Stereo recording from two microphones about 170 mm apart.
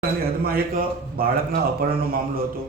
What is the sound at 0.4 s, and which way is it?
Speech, 60° right (ahead or behind).